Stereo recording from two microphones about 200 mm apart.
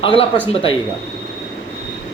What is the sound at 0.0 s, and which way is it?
Speech, 25° left (ahead or behind).